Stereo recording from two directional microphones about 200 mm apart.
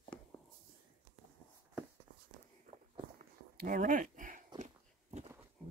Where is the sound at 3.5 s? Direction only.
40° right (ahead or behind).